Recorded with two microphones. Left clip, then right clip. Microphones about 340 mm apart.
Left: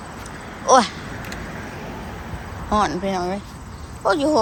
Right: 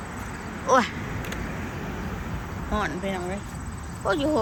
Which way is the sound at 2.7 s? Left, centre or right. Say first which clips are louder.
Left 8 dB; centre.